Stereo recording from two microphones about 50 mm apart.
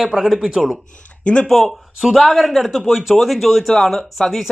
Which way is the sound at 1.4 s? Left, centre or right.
Centre.